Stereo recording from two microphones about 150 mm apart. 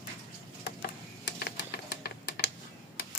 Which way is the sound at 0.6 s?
90° left.